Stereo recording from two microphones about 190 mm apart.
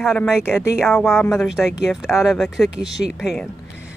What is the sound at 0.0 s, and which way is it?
Speech, centre (ahead or behind).